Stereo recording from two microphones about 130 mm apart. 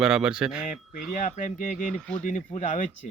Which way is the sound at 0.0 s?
5° right (ahead or behind).